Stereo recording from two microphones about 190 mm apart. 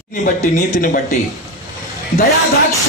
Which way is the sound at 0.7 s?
45° left (ahead or behind).